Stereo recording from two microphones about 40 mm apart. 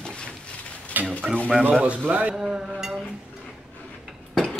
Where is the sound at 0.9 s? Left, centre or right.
Right.